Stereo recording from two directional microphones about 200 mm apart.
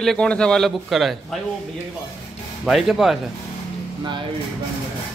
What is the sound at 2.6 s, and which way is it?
Speech, centre (ahead or behind).